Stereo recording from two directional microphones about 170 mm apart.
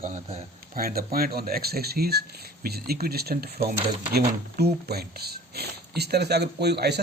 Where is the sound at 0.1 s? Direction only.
40° right (ahead or behind).